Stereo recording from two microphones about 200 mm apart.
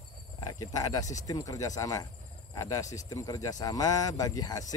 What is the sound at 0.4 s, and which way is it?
Speech, 20° left (ahead or behind).